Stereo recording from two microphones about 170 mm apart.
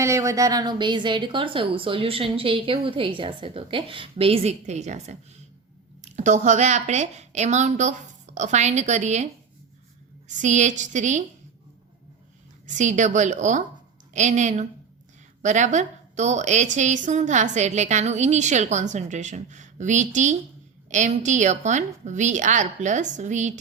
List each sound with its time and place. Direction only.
0.0 s a woman's voice: 15° right (ahead or behind); by 11.2 s 45° right (ahead or behind)
12.6 s a woman's voice: 45° right (ahead or behind)